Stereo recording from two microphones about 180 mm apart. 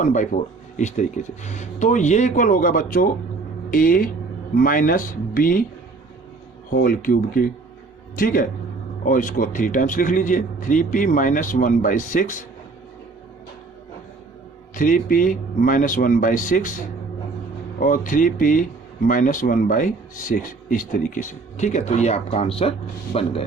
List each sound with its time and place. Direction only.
0.0 s speech: 45° left (ahead or behind)
6.7 s speech: 50° left (ahead or behind)
14.8 s speech: 50° left (ahead or behind)